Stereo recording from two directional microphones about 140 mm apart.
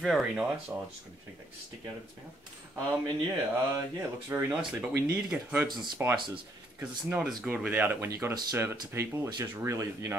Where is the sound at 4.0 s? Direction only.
20° right (ahead or behind).